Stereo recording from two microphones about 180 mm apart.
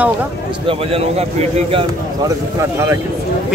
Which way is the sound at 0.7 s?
30° right (ahead or behind).